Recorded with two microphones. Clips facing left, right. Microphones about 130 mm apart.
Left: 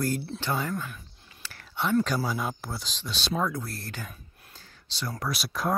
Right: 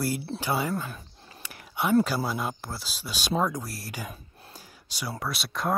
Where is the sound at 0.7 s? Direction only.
35° right (ahead or behind).